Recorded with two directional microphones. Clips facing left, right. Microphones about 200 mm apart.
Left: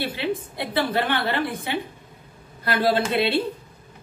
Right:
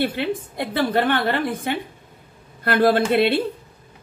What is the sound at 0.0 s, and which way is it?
A woman's voice, 55° right (ahead or behind).